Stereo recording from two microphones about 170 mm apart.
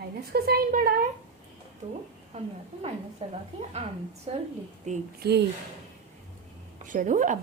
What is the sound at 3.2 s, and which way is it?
A woman's voice, 45° right (ahead or behind).